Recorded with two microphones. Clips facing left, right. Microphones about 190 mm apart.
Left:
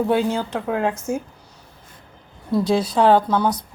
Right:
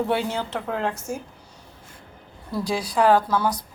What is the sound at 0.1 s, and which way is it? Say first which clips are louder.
Speech: left 5 dB; 10° left (ahead or behind).